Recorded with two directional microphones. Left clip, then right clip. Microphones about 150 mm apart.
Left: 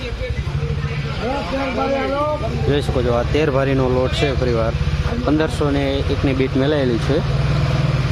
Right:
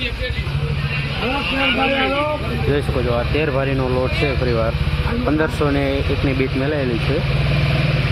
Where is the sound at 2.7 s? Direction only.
20° left (ahead or behind).